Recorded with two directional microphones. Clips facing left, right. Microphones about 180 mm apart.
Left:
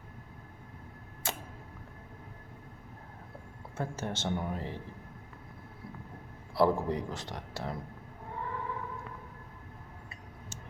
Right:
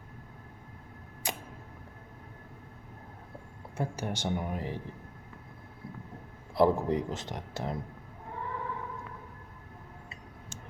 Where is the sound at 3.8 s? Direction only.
15° right (ahead or behind).